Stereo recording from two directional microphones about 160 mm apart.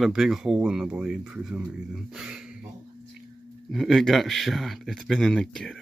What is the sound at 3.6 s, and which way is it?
Speech, centre (ahead or behind).